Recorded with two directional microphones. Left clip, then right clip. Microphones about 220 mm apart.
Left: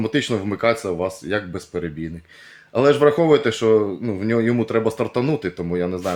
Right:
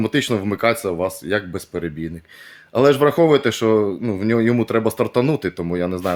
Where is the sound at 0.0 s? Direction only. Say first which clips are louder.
Right 2 dB; 35° right (ahead or behind).